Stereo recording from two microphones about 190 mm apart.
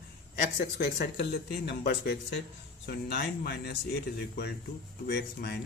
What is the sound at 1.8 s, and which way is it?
Speech, 55° left (ahead or behind).